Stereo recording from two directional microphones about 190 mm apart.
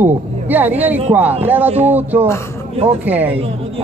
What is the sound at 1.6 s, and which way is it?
Speech, 35° right (ahead or behind).